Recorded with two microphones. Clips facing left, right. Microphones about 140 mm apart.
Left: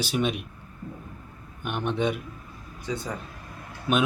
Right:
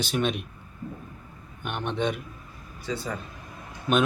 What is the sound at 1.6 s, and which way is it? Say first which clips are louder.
Speech: left 2 dB; 10° left (ahead or behind).